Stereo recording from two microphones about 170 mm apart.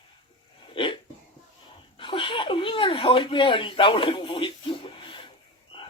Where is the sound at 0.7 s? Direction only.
30° left (ahead or behind).